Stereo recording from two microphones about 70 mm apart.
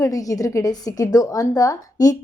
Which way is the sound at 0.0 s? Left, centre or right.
Left.